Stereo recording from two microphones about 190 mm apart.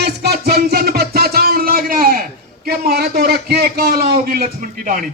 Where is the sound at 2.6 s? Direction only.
55° right (ahead or behind).